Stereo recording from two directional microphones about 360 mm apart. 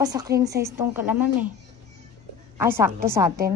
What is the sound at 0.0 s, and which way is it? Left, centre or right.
A woman's voice, centre.